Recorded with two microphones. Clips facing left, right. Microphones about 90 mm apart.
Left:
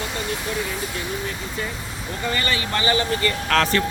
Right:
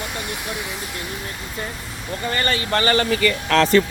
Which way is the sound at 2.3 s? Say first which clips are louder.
Right 5 dB; 40° right (ahead or behind).